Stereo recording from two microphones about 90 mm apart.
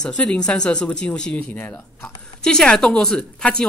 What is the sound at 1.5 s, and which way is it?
Speech, 20° left (ahead or behind).